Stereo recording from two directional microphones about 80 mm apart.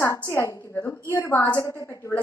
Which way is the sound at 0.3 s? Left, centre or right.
Left.